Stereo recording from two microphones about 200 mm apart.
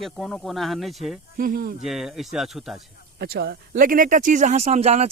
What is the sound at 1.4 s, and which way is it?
Speech, 45° right (ahead or behind).